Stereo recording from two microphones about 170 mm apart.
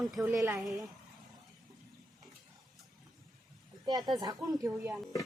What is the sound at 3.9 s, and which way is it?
Speech, 25° right (ahead or behind).